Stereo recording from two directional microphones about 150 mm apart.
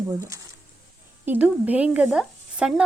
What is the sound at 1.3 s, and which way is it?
Speech, 10° right (ahead or behind).